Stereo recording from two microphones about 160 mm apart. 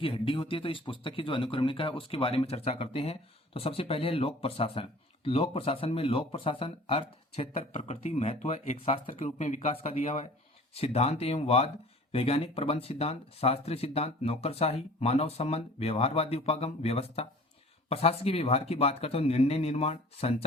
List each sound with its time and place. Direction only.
0.0 s speech: 35° left (ahead or behind)